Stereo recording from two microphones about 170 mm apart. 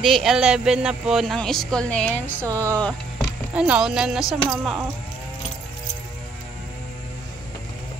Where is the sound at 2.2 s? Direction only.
15° right (ahead or behind).